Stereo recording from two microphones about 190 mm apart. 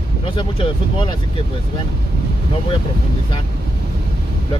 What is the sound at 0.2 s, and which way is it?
Speech, 25° left (ahead or behind).